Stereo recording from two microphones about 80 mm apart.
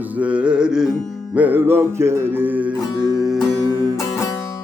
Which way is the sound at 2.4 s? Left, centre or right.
Centre.